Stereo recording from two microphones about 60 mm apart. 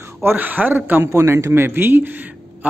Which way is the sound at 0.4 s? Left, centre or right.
Right.